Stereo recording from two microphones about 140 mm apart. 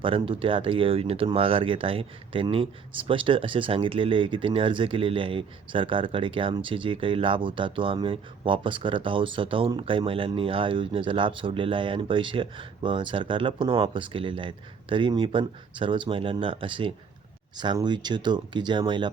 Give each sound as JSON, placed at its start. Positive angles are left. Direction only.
{"t": 0.0, "sound": "speech", "side_deg": -40}